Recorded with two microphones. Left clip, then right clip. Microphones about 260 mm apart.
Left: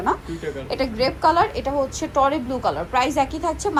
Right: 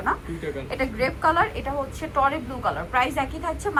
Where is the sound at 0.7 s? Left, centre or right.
Centre.